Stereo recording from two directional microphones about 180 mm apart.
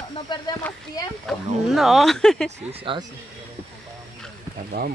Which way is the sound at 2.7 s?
30° right (ahead or behind).